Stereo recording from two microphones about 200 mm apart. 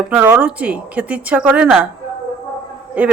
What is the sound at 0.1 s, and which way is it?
Speech, 10° right (ahead or behind).